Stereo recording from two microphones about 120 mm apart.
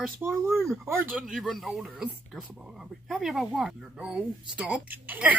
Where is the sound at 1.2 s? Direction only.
Centre (ahead or behind).